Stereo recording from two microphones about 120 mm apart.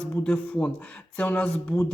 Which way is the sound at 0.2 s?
10° left (ahead or behind).